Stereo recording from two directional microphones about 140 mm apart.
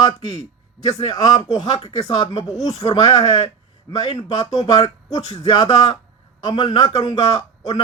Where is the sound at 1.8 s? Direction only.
50° left (ahead or behind).